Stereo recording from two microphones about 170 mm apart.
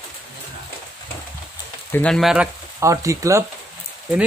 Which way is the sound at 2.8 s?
20° right (ahead or behind).